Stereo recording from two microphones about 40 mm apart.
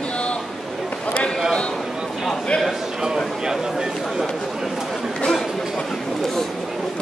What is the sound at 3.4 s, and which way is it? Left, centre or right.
Speech, centre.